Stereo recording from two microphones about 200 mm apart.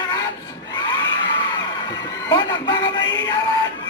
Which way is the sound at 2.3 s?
20° left (ahead or behind).